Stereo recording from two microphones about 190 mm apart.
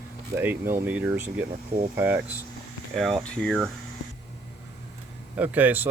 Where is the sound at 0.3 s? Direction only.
10° right (ahead or behind).